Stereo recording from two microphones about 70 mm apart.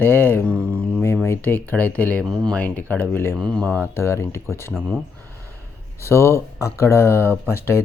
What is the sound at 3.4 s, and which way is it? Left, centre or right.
Speech, centre.